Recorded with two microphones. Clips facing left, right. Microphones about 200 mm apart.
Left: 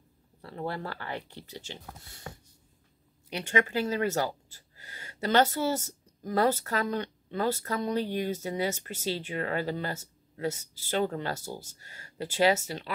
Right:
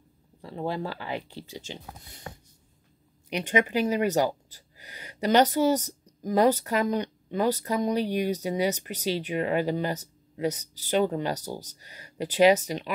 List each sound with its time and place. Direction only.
0.4 s speech: 15° right (ahead or behind)
3.3 s speech: 15° right (ahead or behind)